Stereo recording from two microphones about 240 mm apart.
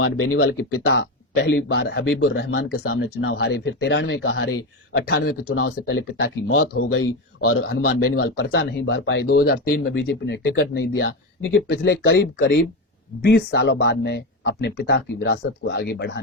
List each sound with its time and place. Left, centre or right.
0.7 s speech: left
5.5 s speech: left